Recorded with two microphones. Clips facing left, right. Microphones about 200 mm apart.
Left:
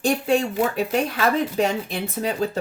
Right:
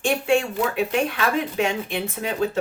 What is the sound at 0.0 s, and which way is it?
Speech, 35° left (ahead or behind).